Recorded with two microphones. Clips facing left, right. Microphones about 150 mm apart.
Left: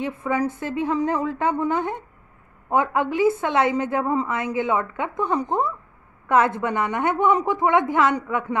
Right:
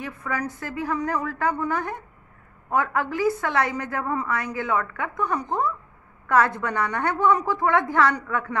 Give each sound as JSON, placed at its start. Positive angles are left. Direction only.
{"t": 0.0, "sound": "a woman's voice", "side_deg": 25}